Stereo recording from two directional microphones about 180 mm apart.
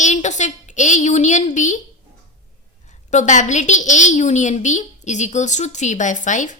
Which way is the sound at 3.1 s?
40° left (ahead or behind).